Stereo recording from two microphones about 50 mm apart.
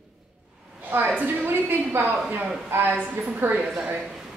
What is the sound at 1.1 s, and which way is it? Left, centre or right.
A woman's voice, right.